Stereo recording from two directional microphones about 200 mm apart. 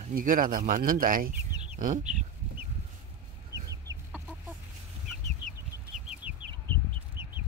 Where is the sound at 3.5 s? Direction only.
15° right (ahead or behind).